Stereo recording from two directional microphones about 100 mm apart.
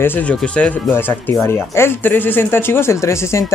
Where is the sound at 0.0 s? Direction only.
15° left (ahead or behind).